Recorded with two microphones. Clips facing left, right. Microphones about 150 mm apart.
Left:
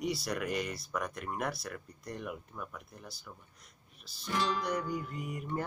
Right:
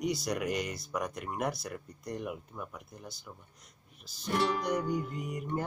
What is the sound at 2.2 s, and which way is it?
Music, 10° right (ahead or behind).